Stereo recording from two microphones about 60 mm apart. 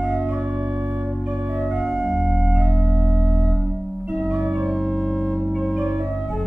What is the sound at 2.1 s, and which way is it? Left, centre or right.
Organ, centre.